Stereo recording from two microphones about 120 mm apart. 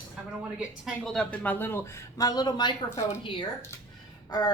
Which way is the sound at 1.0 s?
5° left (ahead or behind).